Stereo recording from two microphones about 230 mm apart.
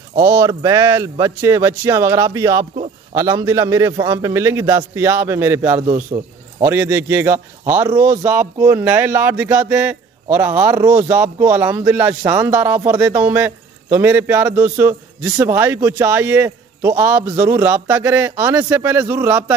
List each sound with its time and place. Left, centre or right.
0.3 s a man's voice: centre
5.9 s a man's voice: right
6.6 s a man's voice: centre